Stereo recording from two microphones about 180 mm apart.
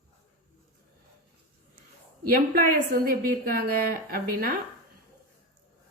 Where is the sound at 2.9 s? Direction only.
55° right (ahead or behind).